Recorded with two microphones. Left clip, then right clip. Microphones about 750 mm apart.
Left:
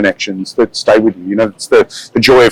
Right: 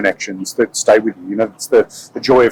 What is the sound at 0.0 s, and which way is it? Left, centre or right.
Speech, left.